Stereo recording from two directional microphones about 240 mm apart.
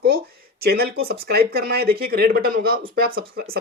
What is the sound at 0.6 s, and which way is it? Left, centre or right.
Speech, right.